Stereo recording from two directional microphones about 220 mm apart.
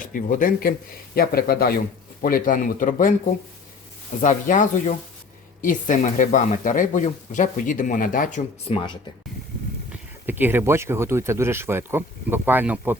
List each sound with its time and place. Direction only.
0.0 s speech: 40° left (ahead or behind)
4.2 s speech: 35° left (ahead or behind)
9.9 s speech: 10° right (ahead or behind)